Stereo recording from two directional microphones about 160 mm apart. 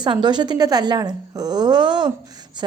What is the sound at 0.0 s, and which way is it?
A woman's voice, 25° right (ahead or behind).